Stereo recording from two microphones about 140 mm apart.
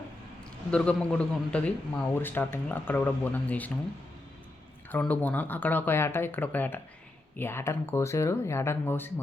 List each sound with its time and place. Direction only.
0.7 s speech: 10° left (ahead or behind)
4.9 s speech: 10° left (ahead or behind)